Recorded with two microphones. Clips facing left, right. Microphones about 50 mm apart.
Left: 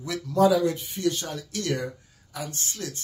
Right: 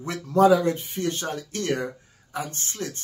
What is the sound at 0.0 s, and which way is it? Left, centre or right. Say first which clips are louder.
Speech: right 2 dB; right.